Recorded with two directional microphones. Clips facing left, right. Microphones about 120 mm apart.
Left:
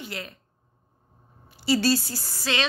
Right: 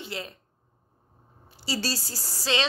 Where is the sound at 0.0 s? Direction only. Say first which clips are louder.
Even; 25° right (ahead or behind).